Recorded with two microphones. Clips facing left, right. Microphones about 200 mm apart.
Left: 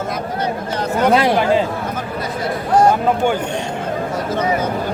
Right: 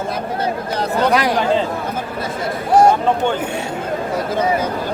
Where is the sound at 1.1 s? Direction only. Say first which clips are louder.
Left 2 dB; 25° left (ahead or behind).